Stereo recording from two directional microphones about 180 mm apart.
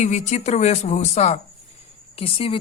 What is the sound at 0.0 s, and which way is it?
Speech, 40° left (ahead or behind).